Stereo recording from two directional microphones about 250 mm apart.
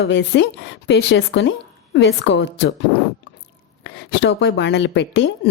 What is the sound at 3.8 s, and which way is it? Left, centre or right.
Speech, left.